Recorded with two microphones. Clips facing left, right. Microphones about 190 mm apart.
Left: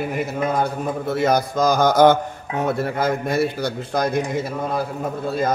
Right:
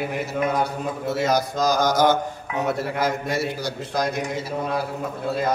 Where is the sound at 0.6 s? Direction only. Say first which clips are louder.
Left 2 dB; 55° left (ahead or behind).